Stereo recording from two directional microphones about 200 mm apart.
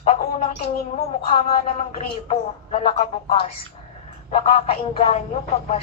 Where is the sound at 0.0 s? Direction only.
30° left (ahead or behind).